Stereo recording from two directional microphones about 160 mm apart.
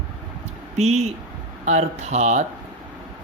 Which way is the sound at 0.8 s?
40° right (ahead or behind).